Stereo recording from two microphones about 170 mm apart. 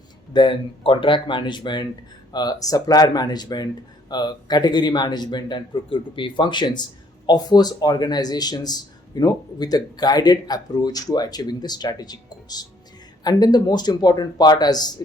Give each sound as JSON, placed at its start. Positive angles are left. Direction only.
{"t": 0.3, "sound": "speech", "side_deg": 30}